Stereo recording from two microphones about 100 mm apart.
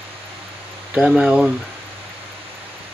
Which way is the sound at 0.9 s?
10° right (ahead or behind).